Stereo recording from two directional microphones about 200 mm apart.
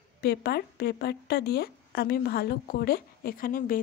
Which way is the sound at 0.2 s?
55° left (ahead or behind).